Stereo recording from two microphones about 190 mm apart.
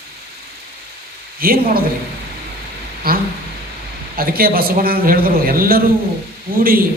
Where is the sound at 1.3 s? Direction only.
50° right (ahead or behind).